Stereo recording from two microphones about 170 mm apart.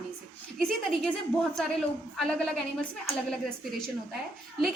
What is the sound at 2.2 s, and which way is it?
Speech, 5° left (ahead or behind).